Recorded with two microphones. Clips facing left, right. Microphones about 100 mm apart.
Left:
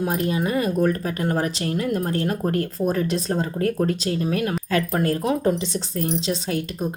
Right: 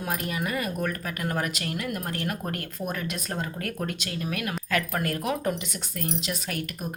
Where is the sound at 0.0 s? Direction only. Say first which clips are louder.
Left 7 dB; 30° left (ahead or behind).